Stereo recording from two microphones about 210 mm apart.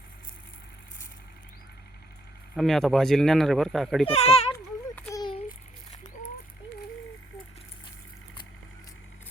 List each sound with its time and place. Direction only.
2.6 s speech: centre (ahead or behind)
4.0 s speech: 30° left (ahead or behind)
4.5 s a sound: 15° left (ahead or behind)